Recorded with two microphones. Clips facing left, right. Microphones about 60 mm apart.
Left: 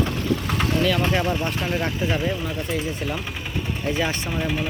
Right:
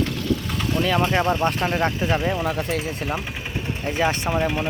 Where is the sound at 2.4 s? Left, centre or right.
Right.